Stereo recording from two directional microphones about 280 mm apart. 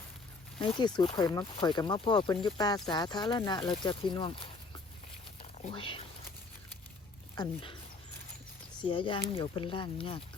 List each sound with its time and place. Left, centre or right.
0.6 s speech: centre
5.4 s a sound: centre
7.3 s speech: centre
8.8 s speech: centre